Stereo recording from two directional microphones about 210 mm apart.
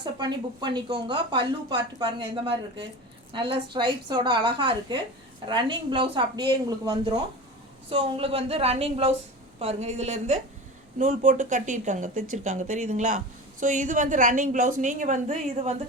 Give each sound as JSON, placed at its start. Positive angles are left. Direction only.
{"t": 0.0, "sound": "a woman's voice", "side_deg": -20}